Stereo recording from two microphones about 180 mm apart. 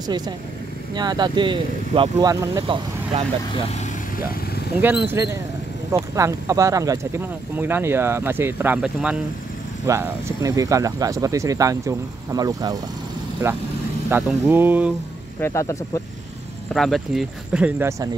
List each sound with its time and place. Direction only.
0.9 s speech: 25° right (ahead or behind)
4.8 s speech: 15° right (ahead or behind)
9.8 s speech: 15° right (ahead or behind)
14.0 s speech: 10° right (ahead or behind)
15.4 s speech: 15° left (ahead or behind)
16.7 s speech: centre (ahead or behind); by 18.1 s 15° right (ahead or behind)